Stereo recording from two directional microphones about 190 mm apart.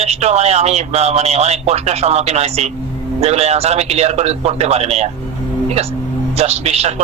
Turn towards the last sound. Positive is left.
turn(degrees=-35)  # may be behind; listen again after turning